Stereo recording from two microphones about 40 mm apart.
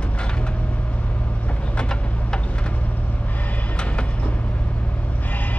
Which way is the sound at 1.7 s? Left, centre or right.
Left.